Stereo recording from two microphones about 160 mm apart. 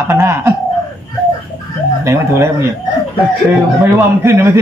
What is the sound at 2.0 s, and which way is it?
Speech, 15° right (ahead or behind).